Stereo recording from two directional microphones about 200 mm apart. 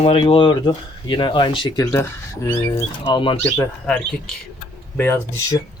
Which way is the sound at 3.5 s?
5° left (ahead or behind).